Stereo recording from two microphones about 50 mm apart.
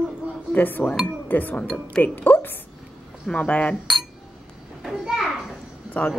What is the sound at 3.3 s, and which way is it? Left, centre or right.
Speech, left.